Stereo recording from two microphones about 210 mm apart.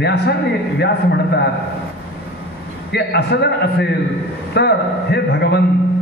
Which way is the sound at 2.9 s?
50° left (ahead or behind).